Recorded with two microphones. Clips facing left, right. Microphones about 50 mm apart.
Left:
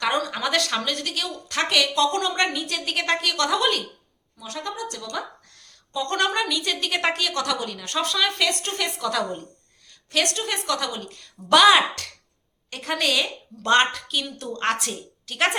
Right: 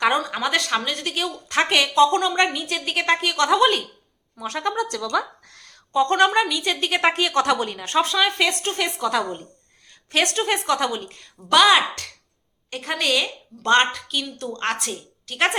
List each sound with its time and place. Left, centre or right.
0.0 s a woman's voice: centre
2.2 s a woman's voice: centre
4.4 s a woman's voice: right
4.7 s speech: right
5.5 s a sound: right
6.1 s a woman's voice: centre
7.1 s a woman's voice: right
11.5 s a woman's voice: centre